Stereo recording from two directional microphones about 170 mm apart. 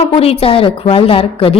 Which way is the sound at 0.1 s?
35° left (ahead or behind).